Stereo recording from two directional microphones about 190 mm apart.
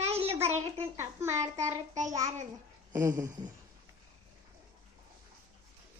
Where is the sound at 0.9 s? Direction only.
15° right (ahead or behind).